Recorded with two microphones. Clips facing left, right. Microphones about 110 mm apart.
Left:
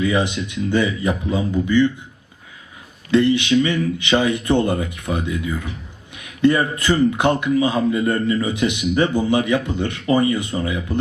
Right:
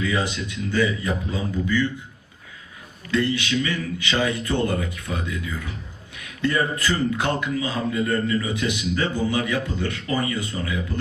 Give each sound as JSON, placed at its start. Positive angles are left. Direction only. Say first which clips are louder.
{"t": 0.0, "sound": "a man's voice", "louder": "left 5 dB", "side_deg": 20}
{"t": 3.1, "sound": "a man's voice", "louder": "left 7 dB", "side_deg": 20}
{"t": 6.4, "sound": "a man's voice", "louder": "left 6 dB", "side_deg": 20}